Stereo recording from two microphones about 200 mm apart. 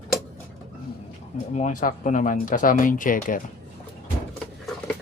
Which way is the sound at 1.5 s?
40° left (ahead or behind).